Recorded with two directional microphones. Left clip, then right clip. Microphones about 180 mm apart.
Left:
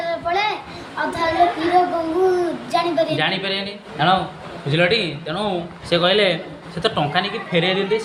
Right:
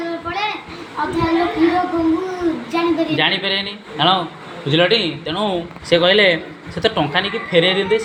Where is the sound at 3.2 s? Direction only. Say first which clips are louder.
Right 4 dB; 10° right (ahead or behind).